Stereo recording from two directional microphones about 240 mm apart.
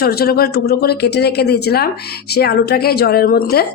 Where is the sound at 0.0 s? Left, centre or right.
Left.